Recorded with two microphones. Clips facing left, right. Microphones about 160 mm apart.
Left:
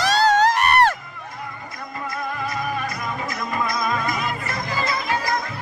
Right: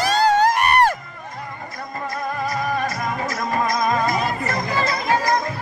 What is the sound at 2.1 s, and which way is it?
Music, 40° right (ahead or behind).